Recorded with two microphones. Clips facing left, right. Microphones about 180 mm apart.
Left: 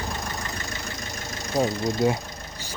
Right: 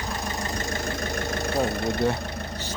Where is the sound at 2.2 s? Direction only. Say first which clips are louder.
Right 6 dB; 65° right (ahead or behind).